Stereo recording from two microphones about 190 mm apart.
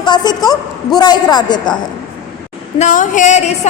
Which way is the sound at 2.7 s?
40° left (ahead or behind).